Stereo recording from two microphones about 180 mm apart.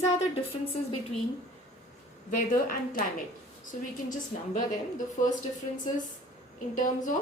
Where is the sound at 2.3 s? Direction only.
50° left (ahead or behind).